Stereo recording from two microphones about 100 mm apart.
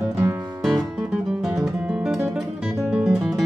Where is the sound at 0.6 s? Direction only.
Centre (ahead or behind).